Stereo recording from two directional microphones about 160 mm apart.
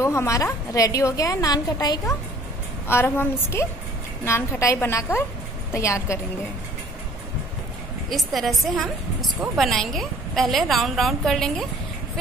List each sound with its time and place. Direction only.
0.0 s a woman's voice: 20° left (ahead or behind)
8.1 s a woman's voice: centre (ahead or behind)